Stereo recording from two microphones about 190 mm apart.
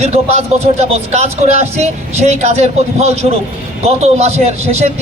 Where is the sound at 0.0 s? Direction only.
35° right (ahead or behind).